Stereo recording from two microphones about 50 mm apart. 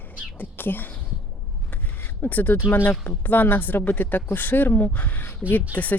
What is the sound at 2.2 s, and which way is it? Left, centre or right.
A woman's voice, left.